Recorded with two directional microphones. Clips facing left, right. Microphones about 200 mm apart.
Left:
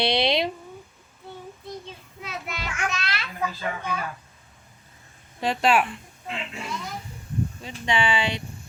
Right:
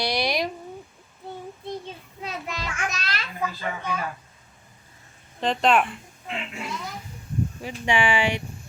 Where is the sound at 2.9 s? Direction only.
45° right (ahead or behind).